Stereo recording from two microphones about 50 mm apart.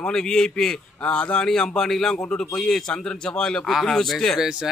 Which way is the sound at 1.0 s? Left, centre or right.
Left.